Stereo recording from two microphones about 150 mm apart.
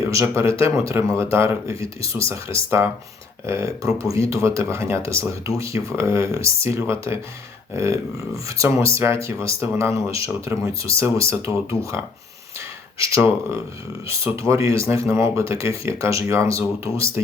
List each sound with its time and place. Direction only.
0.0 s speech: 20° right (ahead or behind)